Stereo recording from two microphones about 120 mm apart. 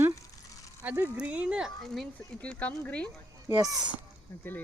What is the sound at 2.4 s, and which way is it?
Speech, 10° left (ahead or behind).